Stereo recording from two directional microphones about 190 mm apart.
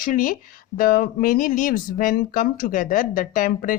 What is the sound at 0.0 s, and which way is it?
Speech, 45° left (ahead or behind).